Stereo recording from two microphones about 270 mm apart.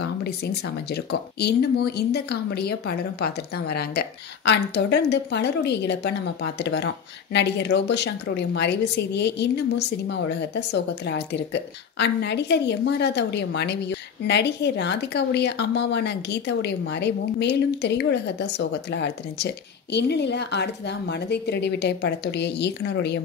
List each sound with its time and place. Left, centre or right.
0.0 s a woman's voice: left